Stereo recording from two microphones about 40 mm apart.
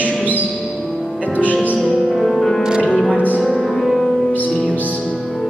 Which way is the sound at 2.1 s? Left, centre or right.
Centre.